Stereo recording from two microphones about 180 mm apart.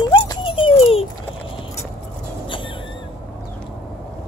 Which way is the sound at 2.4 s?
30° left (ahead or behind).